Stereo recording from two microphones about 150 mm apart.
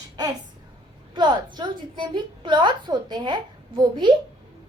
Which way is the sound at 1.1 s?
30° right (ahead or behind).